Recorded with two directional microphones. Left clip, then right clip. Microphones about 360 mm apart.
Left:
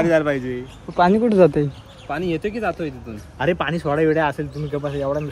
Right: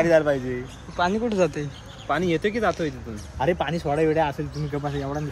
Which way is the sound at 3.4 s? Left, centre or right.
Left.